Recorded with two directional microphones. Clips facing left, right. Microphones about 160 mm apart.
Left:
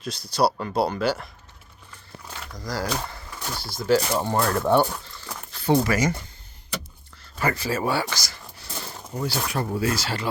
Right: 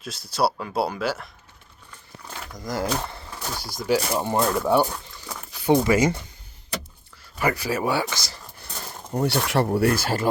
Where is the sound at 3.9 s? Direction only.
10° right (ahead or behind).